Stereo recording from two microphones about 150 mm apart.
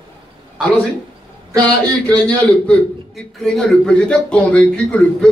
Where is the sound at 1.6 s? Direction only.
10° left (ahead or behind).